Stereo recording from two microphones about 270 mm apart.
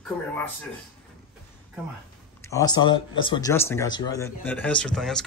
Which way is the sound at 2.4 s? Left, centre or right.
Centre.